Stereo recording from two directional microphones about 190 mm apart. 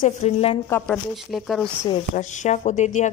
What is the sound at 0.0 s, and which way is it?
Speech, 35° left (ahead or behind).